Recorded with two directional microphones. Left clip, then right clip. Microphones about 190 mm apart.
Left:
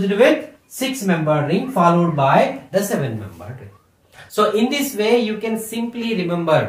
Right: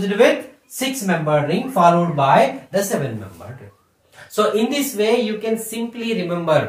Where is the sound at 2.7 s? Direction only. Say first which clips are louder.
Left 1 dB; 20° left (ahead or behind).